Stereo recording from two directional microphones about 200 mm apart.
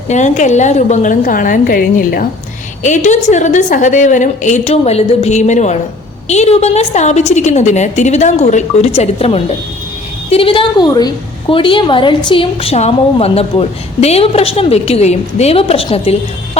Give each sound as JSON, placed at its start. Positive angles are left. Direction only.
{"t": 0.1, "sound": "a woman's voice", "side_deg": 35}